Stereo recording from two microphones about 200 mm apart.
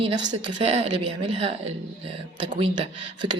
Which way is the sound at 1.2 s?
30° right (ahead or behind).